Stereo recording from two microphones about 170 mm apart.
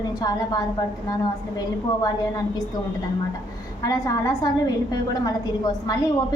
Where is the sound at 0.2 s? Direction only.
25° left (ahead or behind).